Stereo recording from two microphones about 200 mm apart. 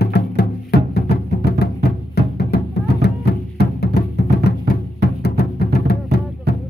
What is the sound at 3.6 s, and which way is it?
Music, 55° left (ahead or behind).